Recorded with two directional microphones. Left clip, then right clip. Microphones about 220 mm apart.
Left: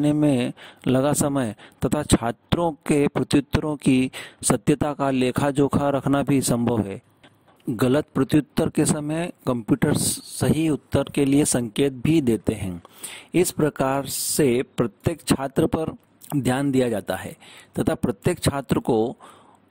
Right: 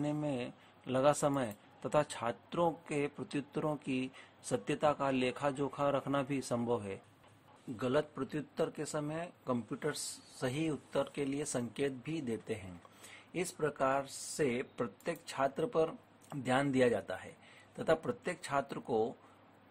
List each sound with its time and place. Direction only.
0.0 s speech: 50° left (ahead or behind)